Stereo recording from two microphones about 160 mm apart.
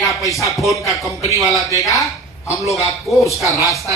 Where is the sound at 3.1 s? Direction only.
Centre (ahead or behind).